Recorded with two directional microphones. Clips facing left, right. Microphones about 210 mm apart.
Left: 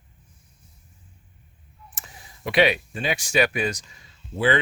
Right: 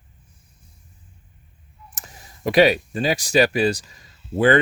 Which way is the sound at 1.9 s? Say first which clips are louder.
Right 2 dB; 40° right (ahead or behind).